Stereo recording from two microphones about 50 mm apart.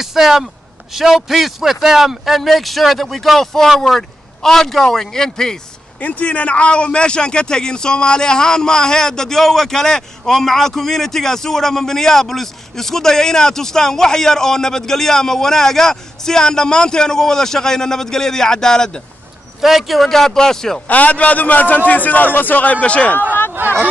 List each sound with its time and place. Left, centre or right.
0.0 s a man's voice: centre
5.9 s a man's voice: left; by 19.0 s centre
19.6 s a man's voice: centre
20.9 s a man's voice: left